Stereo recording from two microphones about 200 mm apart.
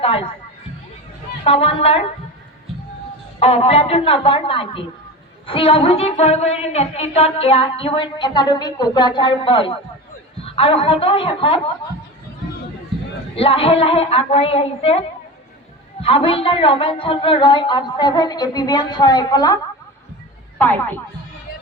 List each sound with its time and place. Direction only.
0.0 s a sound: 25° left (ahead or behind)
1.5 s a woman's voice: 30° left (ahead or behind)
3.4 s a woman's voice: 30° left (ahead or behind)
13.3 s a woman's voice: 30° left (ahead or behind)
20.6 s speech: 10° left (ahead or behind)